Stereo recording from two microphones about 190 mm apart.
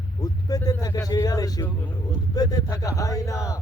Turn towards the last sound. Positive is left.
turn(degrees=15)  # may be behind; listen again after turning